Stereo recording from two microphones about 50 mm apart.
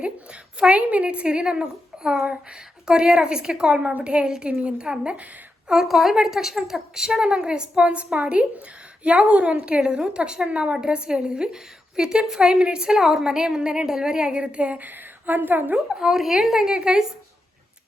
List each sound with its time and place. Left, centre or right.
0.0 s a woman's voice: right
2.2 s a woman's voice: right
5.6 s a woman's voice: centre; by 15.7 s right
15.7 s a woman's voice: centre